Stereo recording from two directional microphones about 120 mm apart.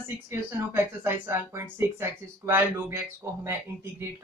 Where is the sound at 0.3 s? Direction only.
20° right (ahead or behind).